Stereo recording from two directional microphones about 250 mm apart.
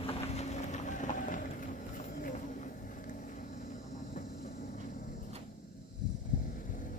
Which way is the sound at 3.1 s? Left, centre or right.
Left.